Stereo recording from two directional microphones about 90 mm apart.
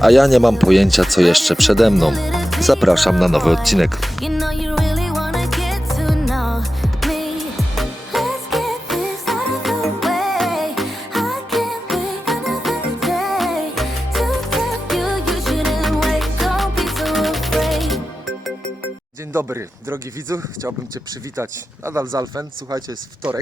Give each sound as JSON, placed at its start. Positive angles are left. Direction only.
{"t": 0.0, "sound": "a sound", "side_deg": 0}
{"t": 19.3, "sound": "speech", "side_deg": -25}
{"t": 21.9, "sound": "speech", "side_deg": -30}